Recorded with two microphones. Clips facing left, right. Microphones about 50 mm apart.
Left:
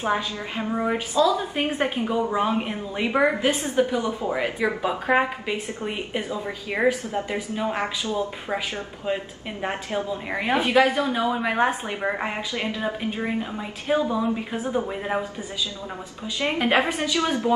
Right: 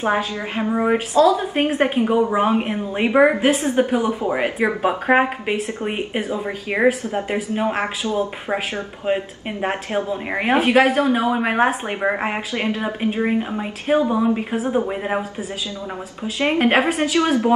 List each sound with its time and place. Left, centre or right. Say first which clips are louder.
0.0 s a woman's voice: right 4 dB; right
2.1 s a woman's voice: right 4 dB; right
13.8 s a woman's voice: right 5 dB; right
16.3 s a woman's voice: right 4 dB; right